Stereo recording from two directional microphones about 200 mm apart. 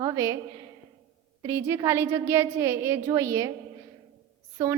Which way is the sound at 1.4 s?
15° right (ahead or behind).